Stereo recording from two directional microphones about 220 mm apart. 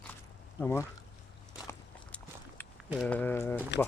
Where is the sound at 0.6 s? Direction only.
10° left (ahead or behind).